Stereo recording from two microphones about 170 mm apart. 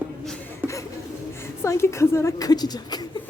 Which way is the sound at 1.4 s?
15° left (ahead or behind).